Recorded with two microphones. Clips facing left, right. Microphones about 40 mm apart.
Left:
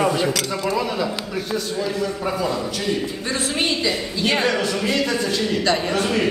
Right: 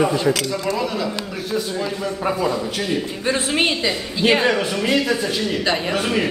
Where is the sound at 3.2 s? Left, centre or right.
Right.